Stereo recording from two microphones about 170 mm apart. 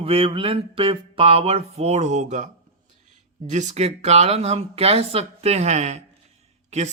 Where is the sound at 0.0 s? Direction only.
35° right (ahead or behind).